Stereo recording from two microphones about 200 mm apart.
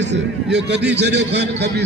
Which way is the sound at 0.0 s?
60° right (ahead or behind).